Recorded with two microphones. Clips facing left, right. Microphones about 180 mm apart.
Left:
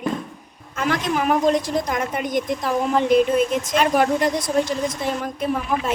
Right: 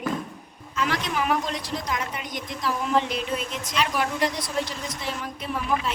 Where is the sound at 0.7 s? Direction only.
50° left (ahead or behind).